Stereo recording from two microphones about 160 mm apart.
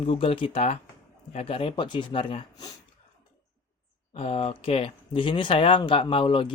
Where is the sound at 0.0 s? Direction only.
35° left (ahead or behind).